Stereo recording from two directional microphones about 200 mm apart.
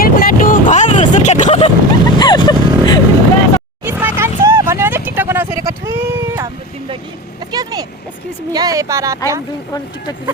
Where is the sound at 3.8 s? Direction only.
10° right (ahead or behind).